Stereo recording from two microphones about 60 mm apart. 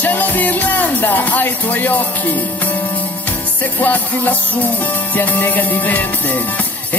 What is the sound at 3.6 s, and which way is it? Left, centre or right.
Music, left.